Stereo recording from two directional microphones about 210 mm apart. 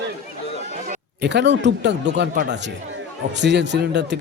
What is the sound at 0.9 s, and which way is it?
Speech, 55° right (ahead or behind).